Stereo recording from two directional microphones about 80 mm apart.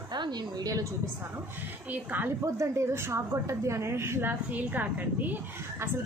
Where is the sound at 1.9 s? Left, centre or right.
Right.